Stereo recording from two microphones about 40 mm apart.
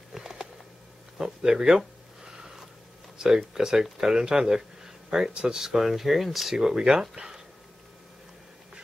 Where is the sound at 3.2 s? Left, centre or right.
Centre.